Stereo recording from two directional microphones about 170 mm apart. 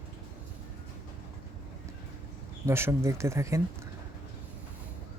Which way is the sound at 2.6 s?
15° right (ahead or behind).